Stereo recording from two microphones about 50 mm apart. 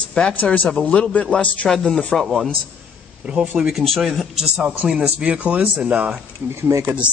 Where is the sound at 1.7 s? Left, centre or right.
Centre.